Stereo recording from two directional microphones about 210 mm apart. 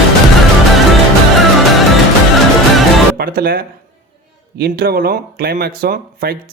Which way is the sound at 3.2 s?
45° right (ahead or behind).